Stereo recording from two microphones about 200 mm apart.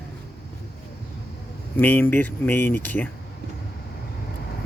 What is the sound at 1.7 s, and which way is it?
Speech, 10° left (ahead or behind).